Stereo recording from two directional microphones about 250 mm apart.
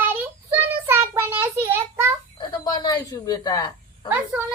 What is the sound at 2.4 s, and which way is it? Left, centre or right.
Speech, centre.